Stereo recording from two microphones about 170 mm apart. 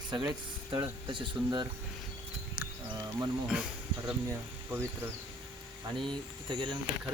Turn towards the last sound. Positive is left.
turn(degrees=-25)  # may be behind; listen again after turning